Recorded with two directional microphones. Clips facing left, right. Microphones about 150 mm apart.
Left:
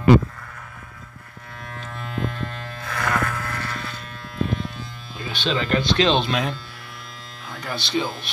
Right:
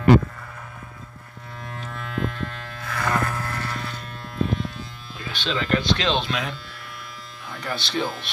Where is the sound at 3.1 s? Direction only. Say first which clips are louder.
Even; 25° right (ahead or behind).